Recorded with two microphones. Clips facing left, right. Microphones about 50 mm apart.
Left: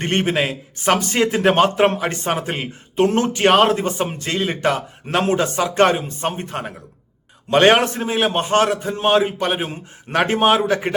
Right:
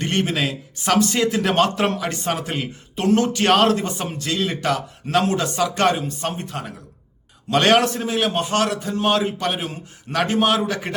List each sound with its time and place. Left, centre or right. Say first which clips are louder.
0.0 s speech: left 3 dB; left